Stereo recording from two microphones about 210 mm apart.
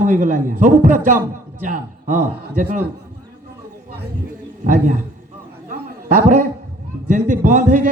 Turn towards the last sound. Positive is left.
turn(degrees=-35)  # may be behind; listen again after turning